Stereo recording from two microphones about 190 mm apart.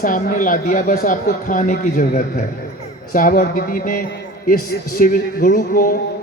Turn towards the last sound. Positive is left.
turn(degrees=45)  # may be behind; listen again after turning